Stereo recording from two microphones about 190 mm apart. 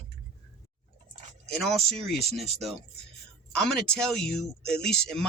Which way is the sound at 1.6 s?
Centre (ahead or behind).